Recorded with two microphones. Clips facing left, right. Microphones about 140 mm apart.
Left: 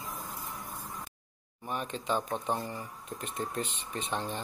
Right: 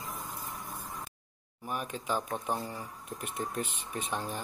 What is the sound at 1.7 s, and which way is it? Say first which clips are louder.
Speech: left 1 dB; 5° right (ahead or behind).